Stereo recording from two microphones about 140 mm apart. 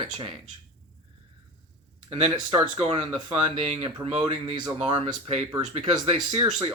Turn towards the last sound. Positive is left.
turn(degrees=-30)  # may be behind; listen again after turning